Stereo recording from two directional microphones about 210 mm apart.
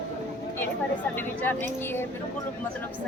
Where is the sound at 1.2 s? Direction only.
10° left (ahead or behind).